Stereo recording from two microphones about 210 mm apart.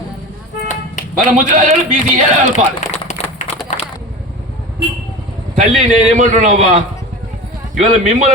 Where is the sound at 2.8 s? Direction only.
35° left (ahead or behind).